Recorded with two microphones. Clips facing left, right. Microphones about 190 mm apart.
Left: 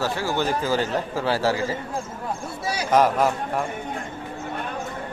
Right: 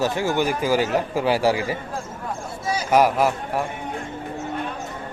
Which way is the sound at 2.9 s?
10° right (ahead or behind).